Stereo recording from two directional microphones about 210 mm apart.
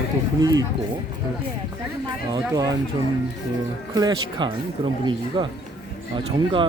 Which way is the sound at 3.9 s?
20° right (ahead or behind).